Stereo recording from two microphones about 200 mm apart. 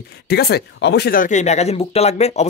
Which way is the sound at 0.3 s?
50° left (ahead or behind).